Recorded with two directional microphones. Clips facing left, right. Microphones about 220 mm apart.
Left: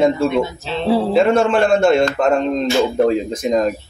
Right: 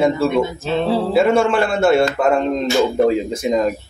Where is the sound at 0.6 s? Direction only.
50° right (ahead or behind).